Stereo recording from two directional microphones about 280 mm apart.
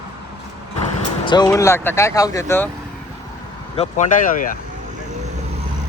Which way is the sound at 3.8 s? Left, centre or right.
Left.